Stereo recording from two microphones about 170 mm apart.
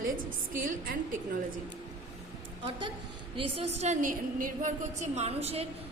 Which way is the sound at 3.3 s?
35° right (ahead or behind).